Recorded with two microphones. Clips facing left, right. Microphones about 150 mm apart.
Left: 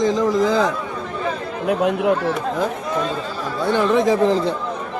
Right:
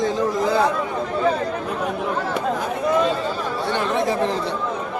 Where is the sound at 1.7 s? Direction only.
75° left (ahead or behind).